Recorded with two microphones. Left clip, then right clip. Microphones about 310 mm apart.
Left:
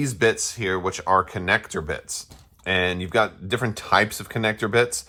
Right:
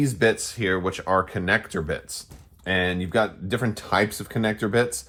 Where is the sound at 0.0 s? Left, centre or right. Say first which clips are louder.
Even; left.